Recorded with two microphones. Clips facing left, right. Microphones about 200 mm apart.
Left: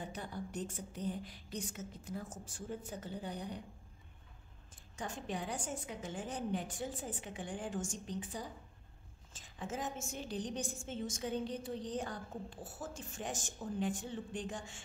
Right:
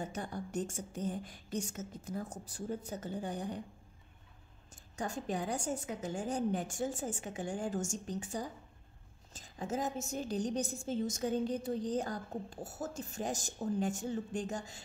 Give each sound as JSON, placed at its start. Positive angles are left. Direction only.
{"t": 0.0, "sound": "a woman's voice", "side_deg": -45}
{"t": 4.9, "sound": "a woman's voice", "side_deg": -40}